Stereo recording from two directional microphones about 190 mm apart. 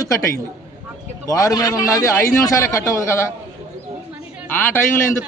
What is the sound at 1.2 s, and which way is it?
A man's voice, 20° left (ahead or behind).